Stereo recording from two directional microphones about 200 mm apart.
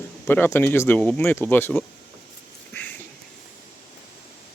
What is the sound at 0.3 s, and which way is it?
Speech, 10° left (ahead or behind).